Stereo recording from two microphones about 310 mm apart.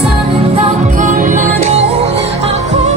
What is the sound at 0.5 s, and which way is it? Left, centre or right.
Music, right.